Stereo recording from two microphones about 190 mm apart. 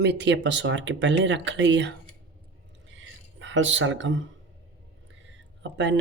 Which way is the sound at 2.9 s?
80° right.